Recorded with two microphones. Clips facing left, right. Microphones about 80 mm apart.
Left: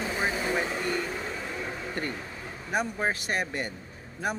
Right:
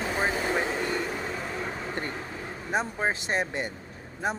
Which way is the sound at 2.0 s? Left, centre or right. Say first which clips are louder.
Right 1 dB; right.